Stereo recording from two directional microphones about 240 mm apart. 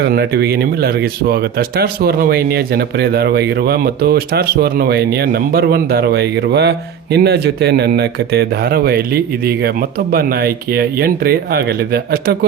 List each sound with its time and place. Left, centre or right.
0.0 s speech: right